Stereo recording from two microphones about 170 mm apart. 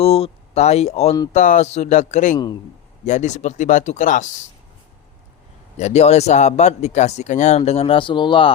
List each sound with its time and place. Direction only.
0.0 s speech: 35° left (ahead or behind)
5.7 s speech: 40° left (ahead or behind)